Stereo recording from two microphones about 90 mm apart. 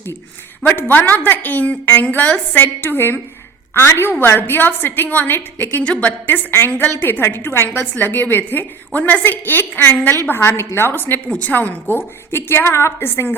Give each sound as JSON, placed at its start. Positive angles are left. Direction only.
{"t": 0.8, "sound": "a woman's voice", "side_deg": 20}